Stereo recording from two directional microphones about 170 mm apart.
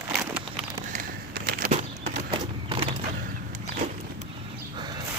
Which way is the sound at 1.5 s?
60° right (ahead or behind).